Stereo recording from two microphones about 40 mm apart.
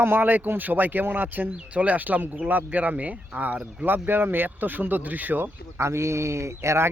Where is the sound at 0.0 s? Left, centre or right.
Right.